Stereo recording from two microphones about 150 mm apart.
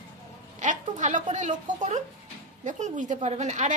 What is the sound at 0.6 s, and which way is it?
A man's voice, 55° right (ahead or behind).